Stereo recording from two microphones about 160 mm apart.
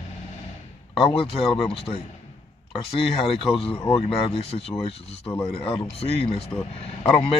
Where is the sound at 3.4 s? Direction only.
35° left (ahead or behind).